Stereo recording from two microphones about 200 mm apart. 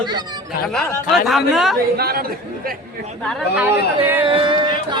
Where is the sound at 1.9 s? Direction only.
50° right (ahead or behind).